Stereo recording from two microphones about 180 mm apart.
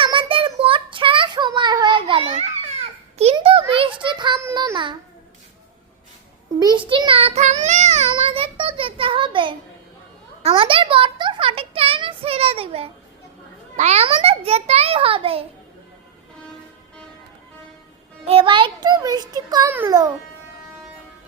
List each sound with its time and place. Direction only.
0.0 s child singing: 30° right (ahead or behind)
3.3 s a sound: 30° right (ahead or behind)
4.5 s babbling: 25° right (ahead or behind)
6.6 s child singing: 25° right (ahead or behind)
10.4 s a sound: 30° right (ahead or behind)
18.3 s child singing: 30° right (ahead or behind)
19.7 s music: 15° right (ahead or behind)